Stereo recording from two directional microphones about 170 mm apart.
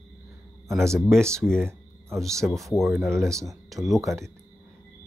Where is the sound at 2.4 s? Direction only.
10° right (ahead or behind).